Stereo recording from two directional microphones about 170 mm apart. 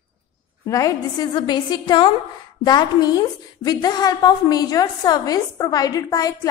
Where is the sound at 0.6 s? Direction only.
20° left (ahead or behind).